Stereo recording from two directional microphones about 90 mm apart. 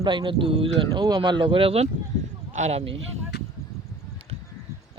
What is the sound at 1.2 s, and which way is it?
Speech, 60° right (ahead or behind).